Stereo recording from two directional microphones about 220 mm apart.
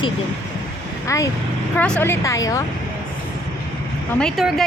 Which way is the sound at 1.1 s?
15° left (ahead or behind).